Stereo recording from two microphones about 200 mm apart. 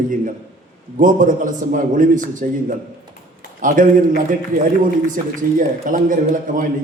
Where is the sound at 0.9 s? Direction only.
40° right (ahead or behind).